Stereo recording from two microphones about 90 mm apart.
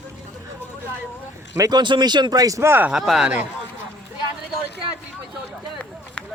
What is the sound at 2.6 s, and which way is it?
Speech, 25° right (ahead or behind).